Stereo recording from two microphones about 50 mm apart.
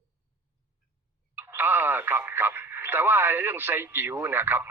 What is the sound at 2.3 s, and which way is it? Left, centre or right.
Radio, right.